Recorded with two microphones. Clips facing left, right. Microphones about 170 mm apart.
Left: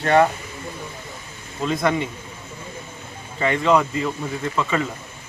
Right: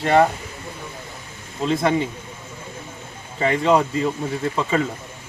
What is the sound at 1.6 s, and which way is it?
Speech, 30° right (ahead or behind).